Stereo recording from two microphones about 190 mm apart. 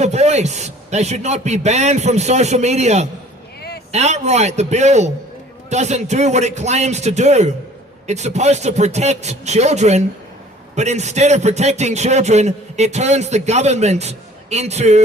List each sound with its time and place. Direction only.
0.0 s a man's voice: 35° right (ahead or behind)